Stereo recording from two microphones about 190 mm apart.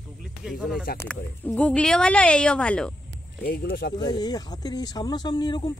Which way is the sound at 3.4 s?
50° left (ahead or behind).